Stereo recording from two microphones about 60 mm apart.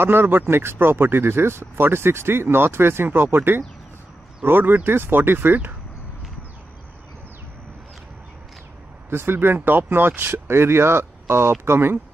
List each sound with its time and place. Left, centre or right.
0.0 s speech: right
9.1 s speech: right